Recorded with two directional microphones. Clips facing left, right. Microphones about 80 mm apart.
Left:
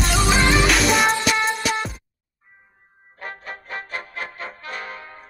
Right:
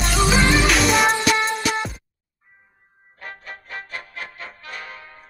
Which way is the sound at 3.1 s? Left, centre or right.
Left.